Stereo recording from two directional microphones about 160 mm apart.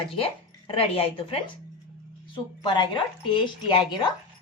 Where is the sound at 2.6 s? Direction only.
30° left (ahead or behind).